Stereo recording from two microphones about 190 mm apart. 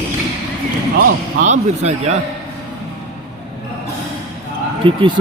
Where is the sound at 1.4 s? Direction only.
35° right (ahead or behind).